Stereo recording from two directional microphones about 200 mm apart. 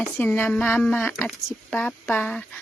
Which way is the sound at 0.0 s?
10° left (ahead or behind).